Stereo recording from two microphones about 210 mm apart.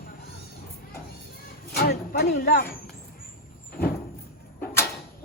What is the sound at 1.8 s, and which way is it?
Speech, 50° left (ahead or behind).